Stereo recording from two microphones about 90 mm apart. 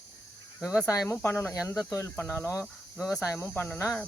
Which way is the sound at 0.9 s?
35° left (ahead or behind).